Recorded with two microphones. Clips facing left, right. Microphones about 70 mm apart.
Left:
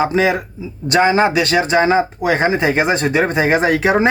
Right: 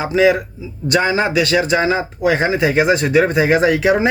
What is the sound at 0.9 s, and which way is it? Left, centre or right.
Speech, left.